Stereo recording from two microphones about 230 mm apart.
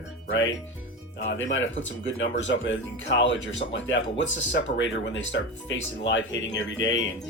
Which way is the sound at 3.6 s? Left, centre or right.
Left.